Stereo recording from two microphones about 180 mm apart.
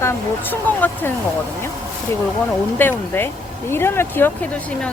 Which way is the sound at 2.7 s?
10° left (ahead or behind).